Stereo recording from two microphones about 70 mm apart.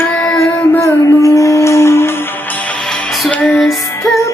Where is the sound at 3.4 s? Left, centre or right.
Centre.